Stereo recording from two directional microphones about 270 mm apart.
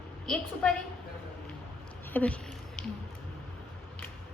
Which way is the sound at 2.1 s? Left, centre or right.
Centre.